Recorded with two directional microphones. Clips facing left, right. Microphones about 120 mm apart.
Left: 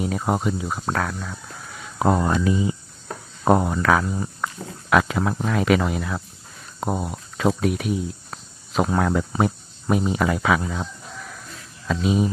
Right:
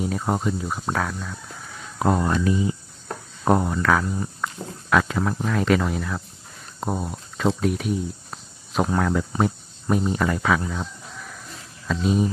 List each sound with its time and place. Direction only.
0.3 s speech: 15° left (ahead or behind)
2.0 s speech: 25° left (ahead or behind)
3.8 s speech: 10° left (ahead or behind)
8.9 s speech: 20° left (ahead or behind)
9.4 s speech: 10° left (ahead or behind)
11.9 s speech: 5° left (ahead or behind)